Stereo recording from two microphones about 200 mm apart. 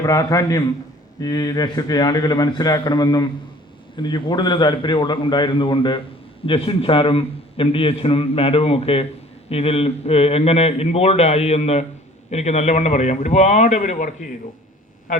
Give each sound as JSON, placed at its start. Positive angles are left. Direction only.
{"t": 0.0, "sound": "a man's voice", "side_deg": 15}